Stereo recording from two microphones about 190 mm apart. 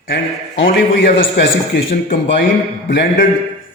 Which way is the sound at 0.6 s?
65° left (ahead or behind).